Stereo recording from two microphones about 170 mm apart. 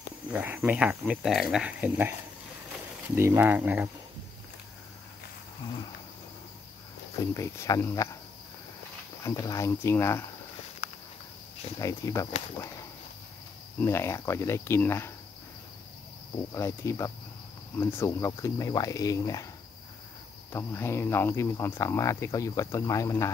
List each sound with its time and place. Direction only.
0.3 s speech: 10° right (ahead or behind)
3.2 s speech: 15° right (ahead or behind)
7.2 s speech: 20° left (ahead or behind)
9.2 s speech: 15° left (ahead or behind)
11.8 s speech: 20° left (ahead or behind)
13.7 s speech: 15° left (ahead or behind)
16.5 s speech: 15° left (ahead or behind)
20.5 s speech: 15° left (ahead or behind)